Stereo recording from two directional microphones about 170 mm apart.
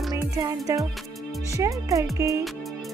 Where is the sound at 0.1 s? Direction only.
20° right (ahead or behind).